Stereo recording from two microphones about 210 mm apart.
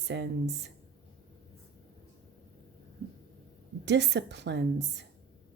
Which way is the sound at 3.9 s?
55° right (ahead or behind).